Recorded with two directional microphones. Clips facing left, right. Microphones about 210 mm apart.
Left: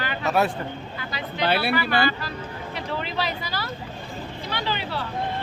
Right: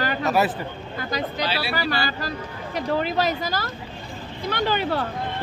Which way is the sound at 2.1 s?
40° right (ahead or behind).